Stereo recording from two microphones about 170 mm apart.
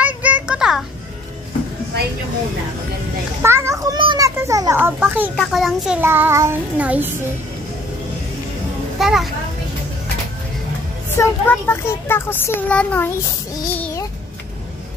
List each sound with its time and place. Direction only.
0.0 s a sound: 10° right (ahead or behind)
3.4 s children playing: 15° right (ahead or behind)
4.4 s child singing: 20° right (ahead or behind)
5.3 s a child's voice: centre (ahead or behind)
5.9 s child singing: 10° right (ahead or behind)
9.0 s a child's voice: centre (ahead or behind)
11.1 s a child's voice: 15° left (ahead or behind)